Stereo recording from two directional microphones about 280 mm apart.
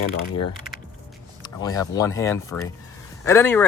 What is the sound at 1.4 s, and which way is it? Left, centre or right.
Speech, centre.